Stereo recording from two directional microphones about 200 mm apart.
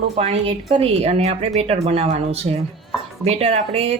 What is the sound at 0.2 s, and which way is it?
A woman's voice, 30° right (ahead or behind).